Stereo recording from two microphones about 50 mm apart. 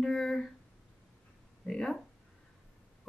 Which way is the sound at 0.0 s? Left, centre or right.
Centre.